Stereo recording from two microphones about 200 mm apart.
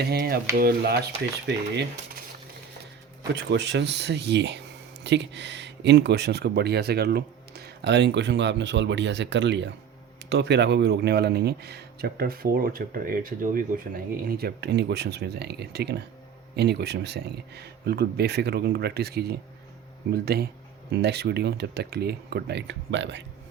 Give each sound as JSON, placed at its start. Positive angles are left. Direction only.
{"t": 0.0, "sound": "a man's voice", "side_deg": -55}
{"t": 3.3, "sound": "a man's voice", "side_deg": -60}